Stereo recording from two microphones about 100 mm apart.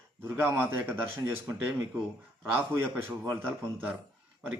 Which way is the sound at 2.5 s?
20° right (ahead or behind).